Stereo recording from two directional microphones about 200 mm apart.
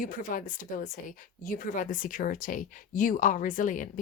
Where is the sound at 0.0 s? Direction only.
40° left (ahead or behind).